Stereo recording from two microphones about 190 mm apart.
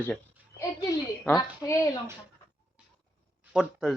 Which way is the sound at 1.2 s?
10° left (ahead or behind).